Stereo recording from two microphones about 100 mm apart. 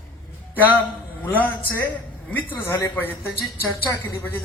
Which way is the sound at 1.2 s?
20° left (ahead or behind).